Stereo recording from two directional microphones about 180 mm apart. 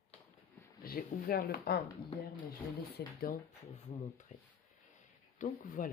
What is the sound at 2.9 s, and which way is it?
Speech, 55° left (ahead or behind).